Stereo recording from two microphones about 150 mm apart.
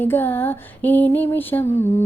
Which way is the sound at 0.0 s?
15° left (ahead or behind).